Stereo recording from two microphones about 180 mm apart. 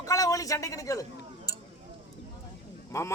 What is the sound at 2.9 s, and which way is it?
Speech, 15° left (ahead or behind).